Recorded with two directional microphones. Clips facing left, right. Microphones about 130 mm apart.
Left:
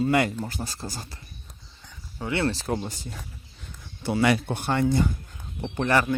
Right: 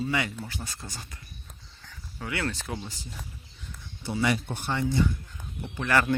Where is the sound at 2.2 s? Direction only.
30° left (ahead or behind); by 5.1 s 50° left (ahead or behind).